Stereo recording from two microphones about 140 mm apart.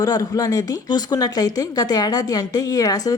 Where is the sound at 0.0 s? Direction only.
25° left (ahead or behind).